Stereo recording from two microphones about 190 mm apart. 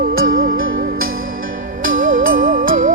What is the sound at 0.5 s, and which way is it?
Music, 90° right.